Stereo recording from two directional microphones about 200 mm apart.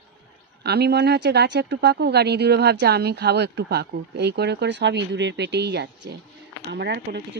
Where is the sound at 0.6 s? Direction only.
55° right (ahead or behind).